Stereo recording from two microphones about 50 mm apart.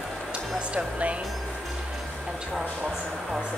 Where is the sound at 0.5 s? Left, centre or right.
Right.